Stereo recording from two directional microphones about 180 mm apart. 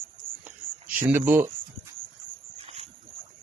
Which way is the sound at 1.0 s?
10° right (ahead or behind).